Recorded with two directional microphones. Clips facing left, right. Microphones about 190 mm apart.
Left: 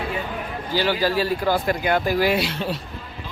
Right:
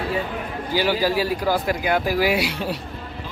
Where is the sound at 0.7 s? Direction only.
10° right (ahead or behind).